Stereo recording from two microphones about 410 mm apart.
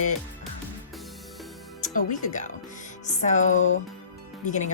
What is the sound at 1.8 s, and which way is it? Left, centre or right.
Speech, centre.